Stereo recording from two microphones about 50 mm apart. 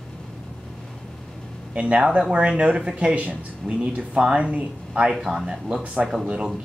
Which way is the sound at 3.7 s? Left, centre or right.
Centre.